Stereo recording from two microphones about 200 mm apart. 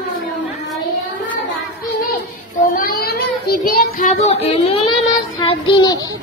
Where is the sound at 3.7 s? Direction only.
40° left (ahead or behind).